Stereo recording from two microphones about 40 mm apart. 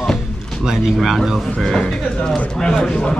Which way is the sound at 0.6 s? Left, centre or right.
Centre.